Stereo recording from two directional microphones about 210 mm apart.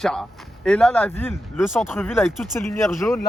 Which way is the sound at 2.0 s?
10° left (ahead or behind).